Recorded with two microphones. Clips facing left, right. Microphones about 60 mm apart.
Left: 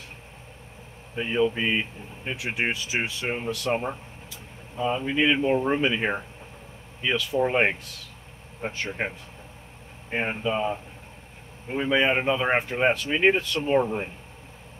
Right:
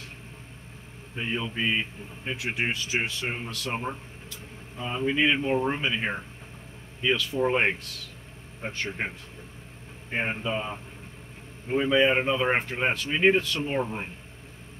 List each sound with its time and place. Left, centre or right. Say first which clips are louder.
1.1 s speech: left 7 dB; centre
10.1 s speech: left 2 dB; centre
11.9 s speech: left 1 dB; centre